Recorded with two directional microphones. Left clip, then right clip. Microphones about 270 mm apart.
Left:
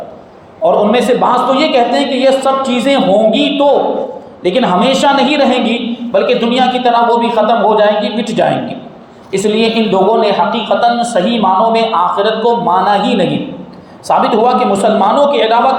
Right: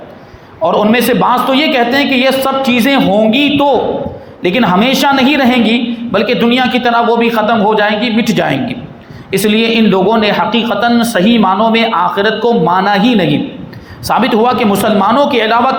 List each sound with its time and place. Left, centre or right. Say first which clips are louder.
0.6 s a woman's voice: left 1 dB; right
14.1 s a woman's voice: left 1 dB; right